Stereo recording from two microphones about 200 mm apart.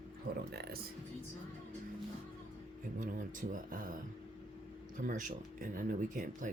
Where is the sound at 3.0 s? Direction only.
40° right (ahead or behind).